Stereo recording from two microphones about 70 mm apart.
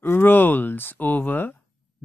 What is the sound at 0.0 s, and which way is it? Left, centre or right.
Speech, left.